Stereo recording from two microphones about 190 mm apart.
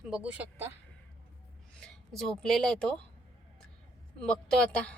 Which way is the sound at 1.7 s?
Centre (ahead or behind).